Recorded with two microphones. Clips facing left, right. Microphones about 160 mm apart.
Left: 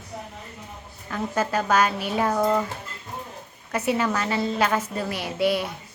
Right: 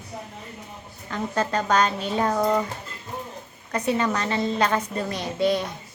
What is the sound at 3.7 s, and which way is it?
Speech, 5° left (ahead or behind).